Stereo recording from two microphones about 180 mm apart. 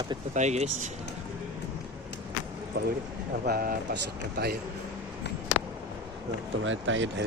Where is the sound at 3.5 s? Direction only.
55° right (ahead or behind).